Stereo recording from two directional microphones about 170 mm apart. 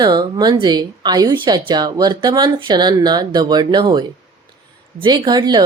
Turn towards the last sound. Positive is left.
turn(degrees=-25)  # may be behind; listen again after turning